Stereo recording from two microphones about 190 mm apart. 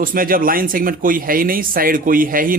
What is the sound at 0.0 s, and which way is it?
Speech, 45° right (ahead or behind).